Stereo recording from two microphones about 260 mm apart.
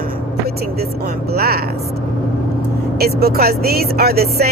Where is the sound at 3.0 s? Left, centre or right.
Right.